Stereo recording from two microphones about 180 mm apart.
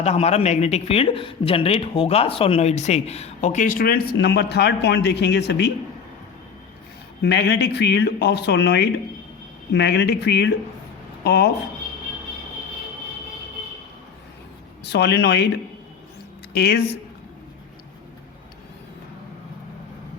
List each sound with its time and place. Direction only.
0.0 s speech: 35° left (ahead or behind); by 5.7 s 70° left (ahead or behind)
7.2 s speech: 70° left (ahead or behind)
14.8 s speech: 70° left (ahead or behind)
16.5 s speech: 60° left (ahead or behind)